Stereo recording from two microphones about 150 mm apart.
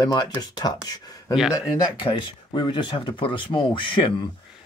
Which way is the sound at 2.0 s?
30° left (ahead or behind).